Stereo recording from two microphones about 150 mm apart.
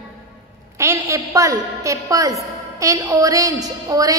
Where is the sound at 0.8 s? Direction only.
20° right (ahead or behind).